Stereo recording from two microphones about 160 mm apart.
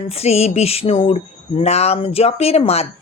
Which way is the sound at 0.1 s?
40° left (ahead or behind).